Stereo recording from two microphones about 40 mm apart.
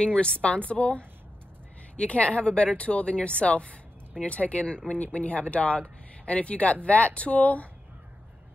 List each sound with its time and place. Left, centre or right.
0.0 s speech: left